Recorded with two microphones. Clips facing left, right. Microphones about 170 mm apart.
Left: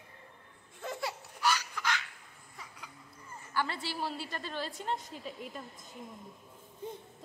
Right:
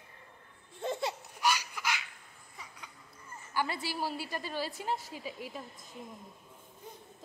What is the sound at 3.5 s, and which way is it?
A woman's voice, 10° right (ahead or behind).